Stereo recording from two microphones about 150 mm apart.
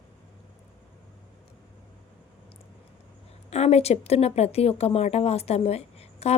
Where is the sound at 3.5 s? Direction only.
45° left (ahead or behind).